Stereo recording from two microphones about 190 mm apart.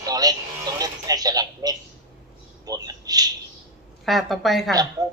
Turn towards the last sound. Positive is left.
turn(degrees=-20)  # may be behind; listen again after turning